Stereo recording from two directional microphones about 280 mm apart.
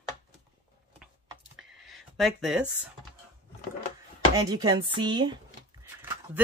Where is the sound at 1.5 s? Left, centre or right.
Centre.